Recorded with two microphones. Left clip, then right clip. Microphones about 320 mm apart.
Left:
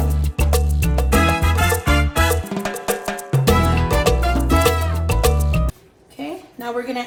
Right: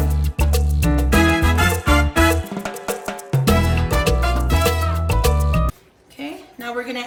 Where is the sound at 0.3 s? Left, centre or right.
Left.